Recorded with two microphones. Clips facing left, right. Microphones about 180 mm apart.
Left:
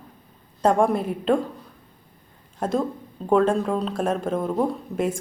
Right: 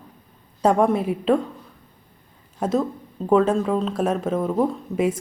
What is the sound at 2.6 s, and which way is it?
A woman's voice, 5° right (ahead or behind).